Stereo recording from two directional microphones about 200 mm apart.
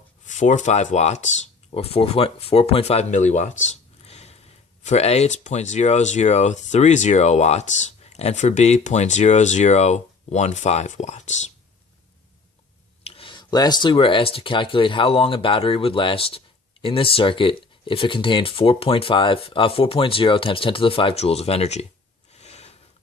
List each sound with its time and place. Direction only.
0.3 s speech: 35° left (ahead or behind)
13.1 s speech: 25° left (ahead or behind)
22.4 s filing: 30° left (ahead or behind)